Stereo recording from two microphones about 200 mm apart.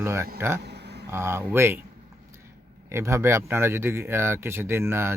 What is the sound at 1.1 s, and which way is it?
Speech, 10° right (ahead or behind).